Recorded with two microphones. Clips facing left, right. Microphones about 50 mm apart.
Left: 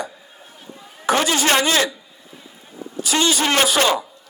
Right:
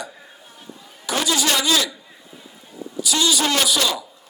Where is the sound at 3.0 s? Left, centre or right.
Left.